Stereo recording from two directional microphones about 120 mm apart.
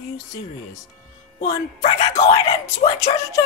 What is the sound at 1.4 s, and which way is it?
Speech, 65° left (ahead or behind).